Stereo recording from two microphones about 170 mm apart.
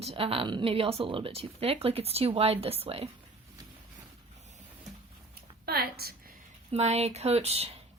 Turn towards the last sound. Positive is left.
turn(degrees=-35)  # may be behind; listen again after turning